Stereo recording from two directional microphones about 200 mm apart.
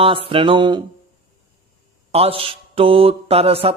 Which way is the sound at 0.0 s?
30° right (ahead or behind).